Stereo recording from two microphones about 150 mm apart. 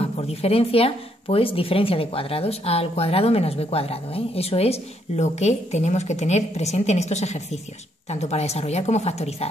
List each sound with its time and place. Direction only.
0.0 s speech: 40° left (ahead or behind)